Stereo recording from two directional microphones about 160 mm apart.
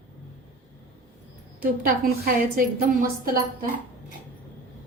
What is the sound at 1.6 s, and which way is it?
A woman's voice, 65° right (ahead or behind).